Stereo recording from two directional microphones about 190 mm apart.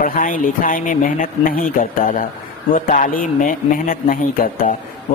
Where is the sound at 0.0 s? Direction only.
45° left (ahead or behind).